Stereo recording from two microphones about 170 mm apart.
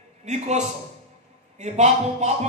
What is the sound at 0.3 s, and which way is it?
A man's voice, 40° right (ahead or behind).